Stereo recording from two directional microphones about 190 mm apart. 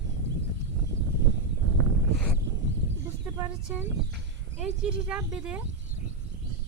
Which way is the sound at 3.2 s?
10° right (ahead or behind).